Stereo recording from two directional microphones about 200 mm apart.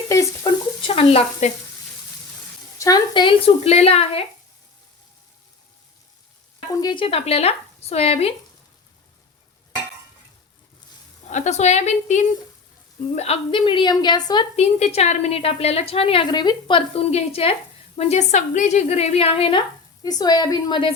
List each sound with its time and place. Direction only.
0.1 s stir: 20° left (ahead or behind)
2.7 s a woman's voice: 20° left (ahead or behind)
6.7 s a woman's voice: 20° left (ahead or behind)
11.3 s a woman's voice: 35° left (ahead or behind)